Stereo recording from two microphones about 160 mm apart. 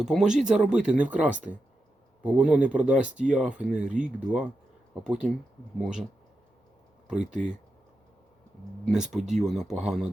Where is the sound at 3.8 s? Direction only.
50° right (ahead or behind).